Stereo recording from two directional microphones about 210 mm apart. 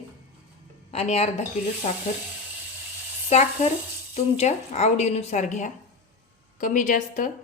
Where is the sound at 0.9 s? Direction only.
30° left (ahead or behind).